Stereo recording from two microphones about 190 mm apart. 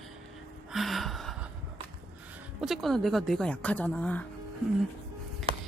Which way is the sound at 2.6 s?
Centre (ahead or behind).